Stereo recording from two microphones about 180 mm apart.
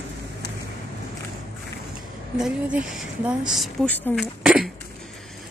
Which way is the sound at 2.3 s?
5° right (ahead or behind).